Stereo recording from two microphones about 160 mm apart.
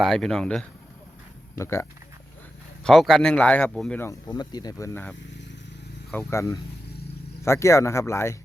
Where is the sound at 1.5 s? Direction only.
15° left (ahead or behind).